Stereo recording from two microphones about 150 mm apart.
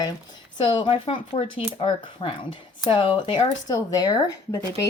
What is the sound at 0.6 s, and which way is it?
A woman's voice, 35° left (ahead or behind).